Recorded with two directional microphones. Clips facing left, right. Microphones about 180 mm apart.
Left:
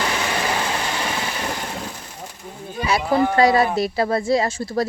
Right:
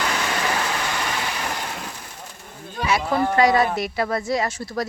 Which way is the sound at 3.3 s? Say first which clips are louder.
Even; 30° left (ahead or behind).